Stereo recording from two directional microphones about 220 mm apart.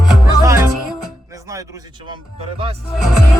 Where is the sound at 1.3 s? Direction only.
15° right (ahead or behind).